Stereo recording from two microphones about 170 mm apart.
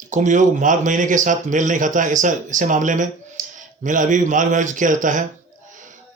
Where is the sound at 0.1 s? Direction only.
45° right (ahead or behind).